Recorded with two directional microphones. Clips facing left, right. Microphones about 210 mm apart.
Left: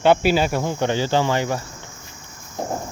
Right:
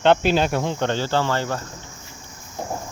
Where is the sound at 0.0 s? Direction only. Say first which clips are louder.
Left 1 dB; 10° left (ahead or behind).